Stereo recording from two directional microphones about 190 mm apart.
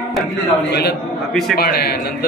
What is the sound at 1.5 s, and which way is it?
Speech, 55° left (ahead or behind).